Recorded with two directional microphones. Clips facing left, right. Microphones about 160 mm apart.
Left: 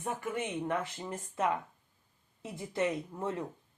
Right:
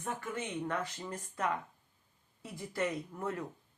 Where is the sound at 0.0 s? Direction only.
20° left (ahead or behind).